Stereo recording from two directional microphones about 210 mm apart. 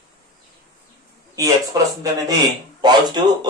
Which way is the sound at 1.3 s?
15° right (ahead or behind).